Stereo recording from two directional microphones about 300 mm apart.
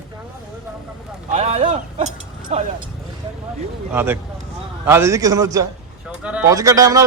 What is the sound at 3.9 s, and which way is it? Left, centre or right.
Speech, centre.